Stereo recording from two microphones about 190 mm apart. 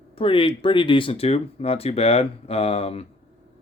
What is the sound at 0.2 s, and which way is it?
Speech, 30° left (ahead or behind).